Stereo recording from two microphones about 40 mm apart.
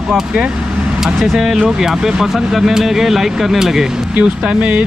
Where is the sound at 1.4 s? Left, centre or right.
Centre.